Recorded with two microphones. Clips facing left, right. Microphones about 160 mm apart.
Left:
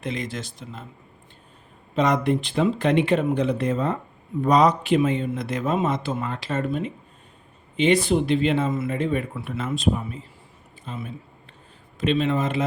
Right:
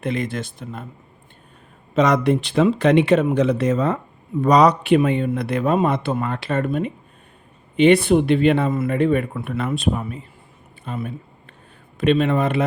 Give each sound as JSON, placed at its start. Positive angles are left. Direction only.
{"t": 0.0, "sound": "a man's voice", "side_deg": -55}
{"t": 2.0, "sound": "a man's voice", "side_deg": -80}